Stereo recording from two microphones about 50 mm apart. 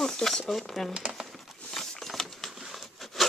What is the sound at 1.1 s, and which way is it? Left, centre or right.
Crumpling, centre.